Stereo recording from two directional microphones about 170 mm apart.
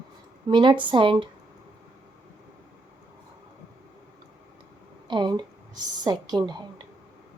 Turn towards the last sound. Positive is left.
turn(degrees=-25)  # may be behind; listen again after turning